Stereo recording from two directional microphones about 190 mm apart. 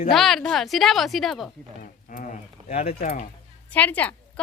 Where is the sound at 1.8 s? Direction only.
45° left (ahead or behind).